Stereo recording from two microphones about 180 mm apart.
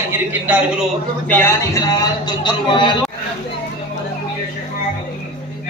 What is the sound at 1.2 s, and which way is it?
A man's voice, 10° left (ahead or behind).